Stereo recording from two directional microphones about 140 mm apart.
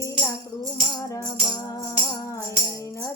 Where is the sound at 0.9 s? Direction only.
25° left (ahead or behind).